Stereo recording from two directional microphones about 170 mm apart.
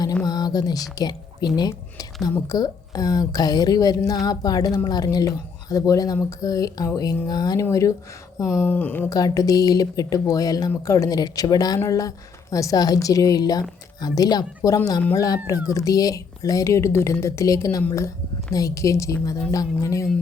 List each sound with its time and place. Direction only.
0.3 s speech: 25° left (ahead or behind)